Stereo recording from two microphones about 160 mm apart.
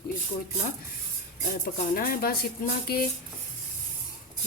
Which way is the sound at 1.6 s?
65° left (ahead or behind).